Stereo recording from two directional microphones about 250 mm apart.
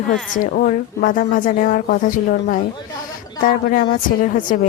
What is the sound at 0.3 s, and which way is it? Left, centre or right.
A woman's voice, left.